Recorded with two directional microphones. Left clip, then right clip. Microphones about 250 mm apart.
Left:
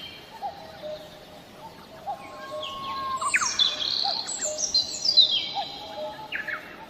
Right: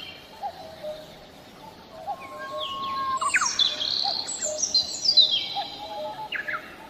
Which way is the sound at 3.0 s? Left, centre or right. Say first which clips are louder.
Right 1 dB; centre.